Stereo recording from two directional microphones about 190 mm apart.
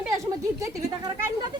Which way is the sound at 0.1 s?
15° right (ahead or behind).